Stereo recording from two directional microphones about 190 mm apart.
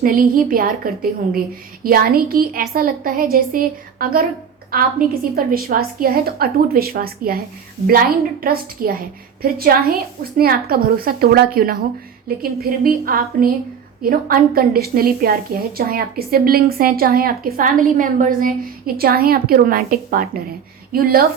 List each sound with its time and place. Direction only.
0.0 s a woman's voice: 50° right (ahead or behind)
1.8 s a woman's voice: 50° right (ahead or behind)